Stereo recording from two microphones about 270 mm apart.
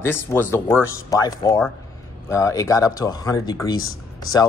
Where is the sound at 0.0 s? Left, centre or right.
Centre.